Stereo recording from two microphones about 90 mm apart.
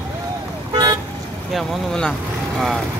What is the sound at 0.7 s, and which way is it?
Vehicle, 50° right (ahead or behind).